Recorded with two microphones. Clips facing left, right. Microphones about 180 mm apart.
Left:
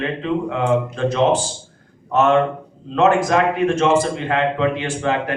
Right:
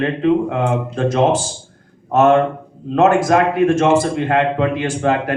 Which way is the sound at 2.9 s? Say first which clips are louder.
Right 2 dB; 45° right (ahead or behind).